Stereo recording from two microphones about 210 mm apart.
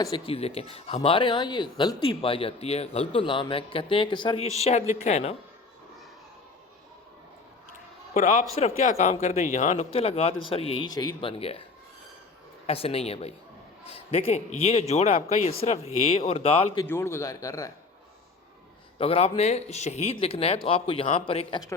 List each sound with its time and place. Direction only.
0.0 s a man's voice: 25° left (ahead or behind)
8.1 s a man's voice: 35° left (ahead or behind)
12.6 s a man's voice: 30° left (ahead or behind)
16.8 s a man's voice: 10° left (ahead or behind)
18.9 s a man's voice: 30° left (ahead or behind)